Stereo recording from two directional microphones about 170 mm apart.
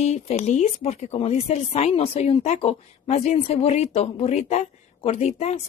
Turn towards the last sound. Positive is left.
turn(degrees=40)  # may be behind; listen again after turning